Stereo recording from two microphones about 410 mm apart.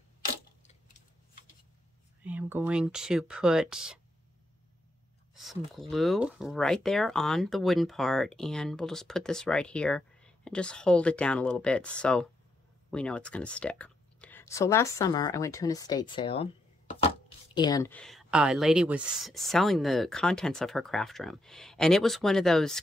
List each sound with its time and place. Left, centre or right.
2.2 s speech: centre
5.3 s speech: centre